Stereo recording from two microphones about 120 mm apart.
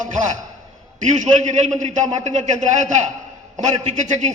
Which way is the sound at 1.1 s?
85° right.